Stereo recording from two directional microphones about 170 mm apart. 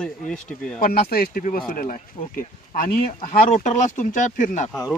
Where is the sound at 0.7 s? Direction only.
60° left (ahead or behind).